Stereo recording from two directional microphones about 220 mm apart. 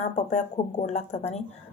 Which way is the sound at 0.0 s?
30° left (ahead or behind).